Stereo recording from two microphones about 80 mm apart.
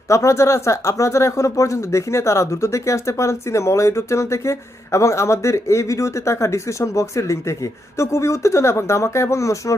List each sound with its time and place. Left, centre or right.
0.1 s speech: left